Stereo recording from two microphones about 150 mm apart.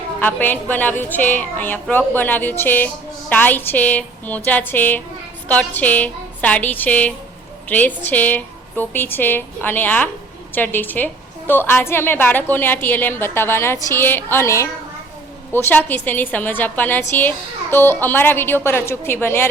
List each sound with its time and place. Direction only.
0.2 s a woman's voice: 10° left (ahead or behind)